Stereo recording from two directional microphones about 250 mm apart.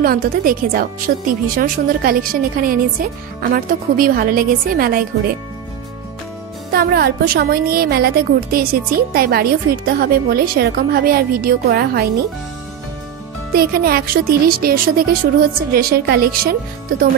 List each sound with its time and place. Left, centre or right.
0.0 s a woman's voice: right
6.7 s a woman's voice: right
13.5 s a woman's voice: right